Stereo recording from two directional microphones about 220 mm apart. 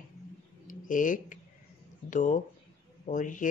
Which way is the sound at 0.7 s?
35° left (ahead or behind).